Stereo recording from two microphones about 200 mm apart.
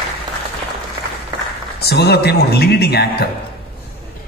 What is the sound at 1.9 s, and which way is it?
A man's voice, 55° left (ahead or behind).